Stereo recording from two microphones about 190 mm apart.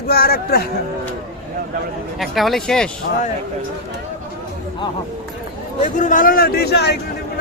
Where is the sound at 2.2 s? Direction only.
Centre (ahead or behind).